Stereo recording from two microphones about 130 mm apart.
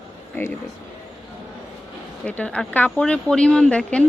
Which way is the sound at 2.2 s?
10° left (ahead or behind).